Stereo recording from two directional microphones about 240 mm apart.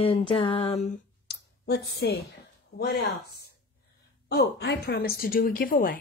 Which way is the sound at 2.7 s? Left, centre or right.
Left.